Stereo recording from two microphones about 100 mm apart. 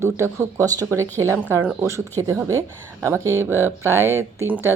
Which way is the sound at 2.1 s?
35° right (ahead or behind).